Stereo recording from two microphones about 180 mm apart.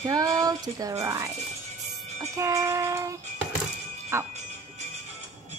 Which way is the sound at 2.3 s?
15° right (ahead or behind).